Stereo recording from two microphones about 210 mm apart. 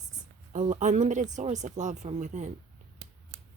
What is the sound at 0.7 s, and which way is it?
Speech, 35° right (ahead or behind).